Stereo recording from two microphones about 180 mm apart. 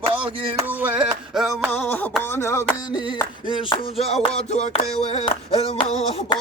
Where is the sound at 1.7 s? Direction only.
10° left (ahead or behind).